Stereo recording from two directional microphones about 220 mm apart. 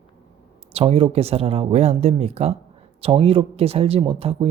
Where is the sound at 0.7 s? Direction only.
25° right (ahead or behind).